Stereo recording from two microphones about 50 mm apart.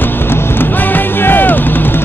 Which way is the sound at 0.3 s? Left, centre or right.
Left.